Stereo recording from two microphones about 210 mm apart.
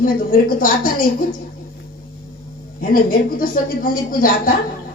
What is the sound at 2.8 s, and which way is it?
A woman's voice, 40° left (ahead or behind).